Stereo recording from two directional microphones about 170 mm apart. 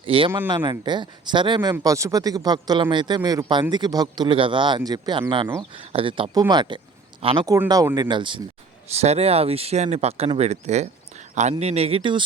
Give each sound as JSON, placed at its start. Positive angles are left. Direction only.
{"t": 0.0, "sound": "speech", "side_deg": -30}
{"t": 7.4, "sound": "speech", "side_deg": -20}
{"t": 9.0, "sound": "speech", "side_deg": -40}